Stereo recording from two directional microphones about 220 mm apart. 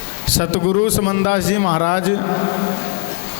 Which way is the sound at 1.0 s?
25° left (ahead or behind).